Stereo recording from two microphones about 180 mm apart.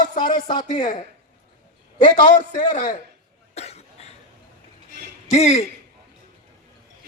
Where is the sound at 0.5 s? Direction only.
45° left (ahead or behind).